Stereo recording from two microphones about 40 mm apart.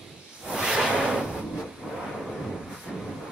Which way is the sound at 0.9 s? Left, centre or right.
Centre.